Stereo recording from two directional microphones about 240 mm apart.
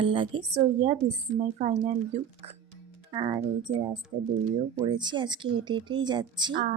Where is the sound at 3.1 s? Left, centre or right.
Centre.